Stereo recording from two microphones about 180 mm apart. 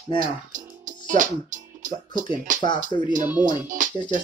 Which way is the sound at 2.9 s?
25° left (ahead or behind).